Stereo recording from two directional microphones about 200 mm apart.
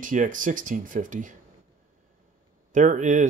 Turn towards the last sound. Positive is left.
turn(degrees=-40)  # may be behind; listen again after turning